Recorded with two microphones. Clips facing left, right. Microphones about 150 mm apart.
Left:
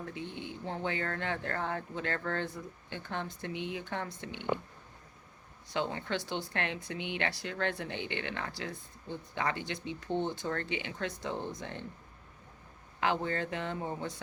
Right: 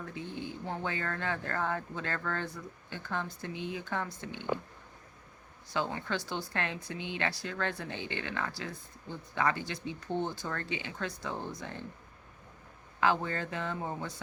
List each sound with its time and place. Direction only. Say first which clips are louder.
0.1 s speech: right 1 dB; 25° left (ahead or behind)
5.7 s speech: even; 25° left (ahead or behind)
13.0 s speech: right 1 dB; 25° left (ahead or behind)